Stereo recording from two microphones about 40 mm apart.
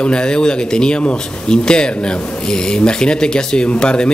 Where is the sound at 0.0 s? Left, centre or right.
Left.